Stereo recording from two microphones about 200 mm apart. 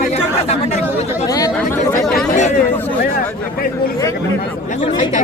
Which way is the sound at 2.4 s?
35° left (ahead or behind).